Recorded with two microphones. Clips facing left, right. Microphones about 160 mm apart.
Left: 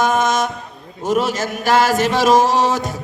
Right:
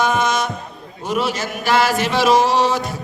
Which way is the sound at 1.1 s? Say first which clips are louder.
Left 3 dB; 45° left (ahead or behind).